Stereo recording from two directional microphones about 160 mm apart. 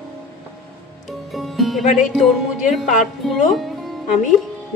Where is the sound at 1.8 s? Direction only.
50° left (ahead or behind).